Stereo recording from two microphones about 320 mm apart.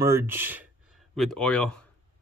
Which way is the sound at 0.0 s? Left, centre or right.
Centre.